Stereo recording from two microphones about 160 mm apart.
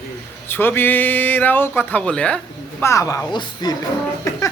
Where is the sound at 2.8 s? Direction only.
20° left (ahead or behind).